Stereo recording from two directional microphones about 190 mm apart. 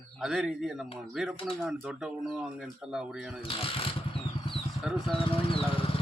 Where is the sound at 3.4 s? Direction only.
30° left (ahead or behind).